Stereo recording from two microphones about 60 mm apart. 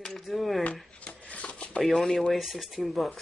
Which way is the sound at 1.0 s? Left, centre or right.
Left.